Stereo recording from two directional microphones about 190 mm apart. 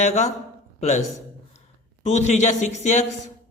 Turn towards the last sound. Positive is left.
turn(degrees=40)  # may be behind; listen again after turning